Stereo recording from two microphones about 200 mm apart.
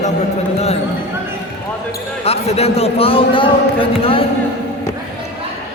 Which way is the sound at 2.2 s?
30° left (ahead or behind).